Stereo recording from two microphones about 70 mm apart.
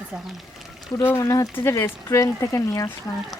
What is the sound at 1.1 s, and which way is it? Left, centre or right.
Speech, left.